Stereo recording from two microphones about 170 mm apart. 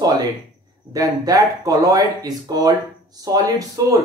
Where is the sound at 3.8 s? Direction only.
20° right (ahead or behind).